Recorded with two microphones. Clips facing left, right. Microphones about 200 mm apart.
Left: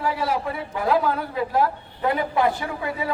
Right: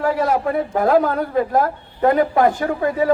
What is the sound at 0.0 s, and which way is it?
A man's voice, 45° right (ahead or behind).